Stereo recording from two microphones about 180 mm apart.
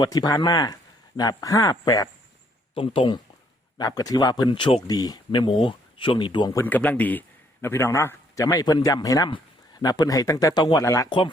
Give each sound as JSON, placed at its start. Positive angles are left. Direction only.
{"t": 0.0, "sound": "speech", "side_deg": 20}